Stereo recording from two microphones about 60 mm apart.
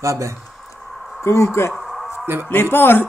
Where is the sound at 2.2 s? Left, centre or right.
Right.